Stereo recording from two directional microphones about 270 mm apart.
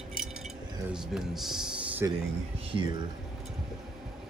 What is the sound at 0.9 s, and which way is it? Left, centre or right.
Speech, centre.